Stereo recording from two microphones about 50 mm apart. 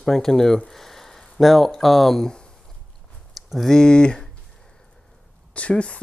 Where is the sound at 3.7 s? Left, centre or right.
Centre.